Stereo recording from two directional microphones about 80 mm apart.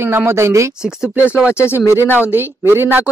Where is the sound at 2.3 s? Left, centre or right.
Right.